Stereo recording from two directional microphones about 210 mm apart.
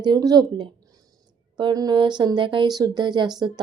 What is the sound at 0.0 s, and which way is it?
Speech, 20° right (ahead or behind).